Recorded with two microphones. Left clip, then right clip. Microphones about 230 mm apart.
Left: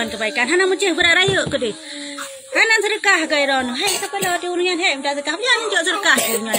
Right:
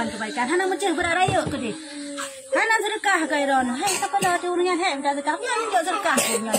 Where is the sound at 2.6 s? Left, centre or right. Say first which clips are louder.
Left 7 dB; centre.